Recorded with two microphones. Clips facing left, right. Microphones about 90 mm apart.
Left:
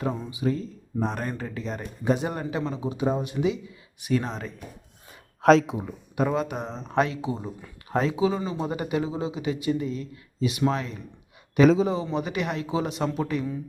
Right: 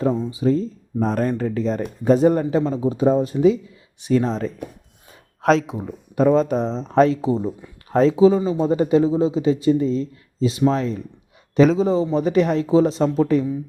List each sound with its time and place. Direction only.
0.0 s speech: 25° right (ahead or behind)
5.4 s speech: centre (ahead or behind)
5.8 s speech: 35° right (ahead or behind)
11.6 s a man's voice: centre (ahead or behind)
12.1 s speech: 35° right (ahead or behind)